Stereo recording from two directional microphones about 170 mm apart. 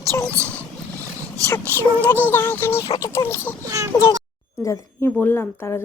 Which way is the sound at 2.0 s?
10° left (ahead or behind).